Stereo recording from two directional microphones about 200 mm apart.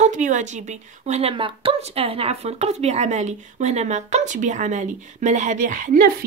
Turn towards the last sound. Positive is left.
turn(degrees=-45)  # may be behind; listen again after turning